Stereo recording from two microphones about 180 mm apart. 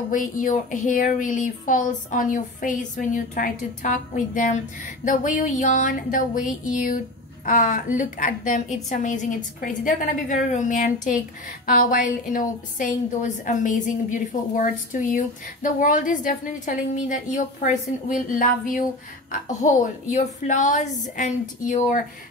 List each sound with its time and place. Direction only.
0.1 s a woman's voice: 45° left (ahead or behind)